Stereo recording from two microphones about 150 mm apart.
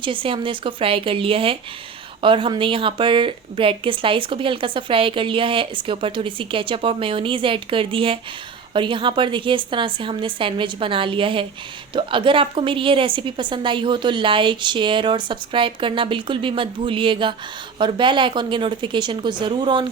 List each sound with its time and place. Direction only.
0.0 s speech: 35° right (ahead or behind)